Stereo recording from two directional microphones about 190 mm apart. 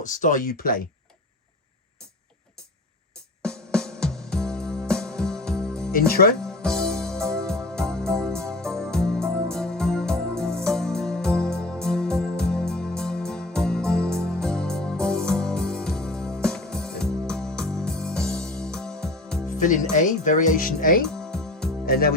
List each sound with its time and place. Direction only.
0.0 s speech: 40° left (ahead or behind)
3.4 s music: 5° left (ahead or behind)
5.9 s speech: 50° left (ahead or behind)
6.4 s music: 5° left (ahead or behind)
19.5 s speech: 40° left (ahead or behind)
21.1 s music: 5° left (ahead or behind)
21.8 s speech: 50° left (ahead or behind)